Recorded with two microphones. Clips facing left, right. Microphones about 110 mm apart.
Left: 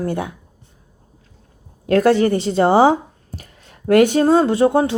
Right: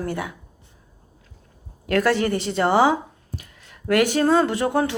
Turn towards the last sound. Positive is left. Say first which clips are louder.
# left 6 dB
turn(degrees=20)  # may be behind; listen again after turning